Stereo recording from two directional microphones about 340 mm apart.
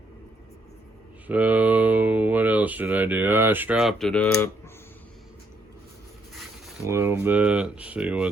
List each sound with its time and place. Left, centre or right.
1.3 s speech: centre
6.3 s speech: centre